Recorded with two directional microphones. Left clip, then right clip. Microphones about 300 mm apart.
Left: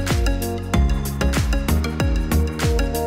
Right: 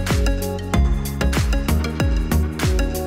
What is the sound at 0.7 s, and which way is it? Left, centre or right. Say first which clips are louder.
Music: even; centre.